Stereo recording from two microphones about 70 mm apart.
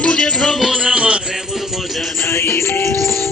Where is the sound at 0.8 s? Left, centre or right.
Centre.